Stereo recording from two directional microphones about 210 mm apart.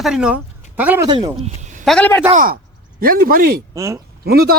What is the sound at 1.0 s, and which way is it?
Speech, 20° right (ahead or behind).